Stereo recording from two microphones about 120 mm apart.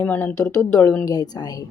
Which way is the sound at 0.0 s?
15° left (ahead or behind).